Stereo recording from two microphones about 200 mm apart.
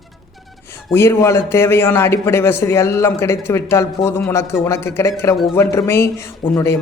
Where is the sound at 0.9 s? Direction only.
15° left (ahead or behind).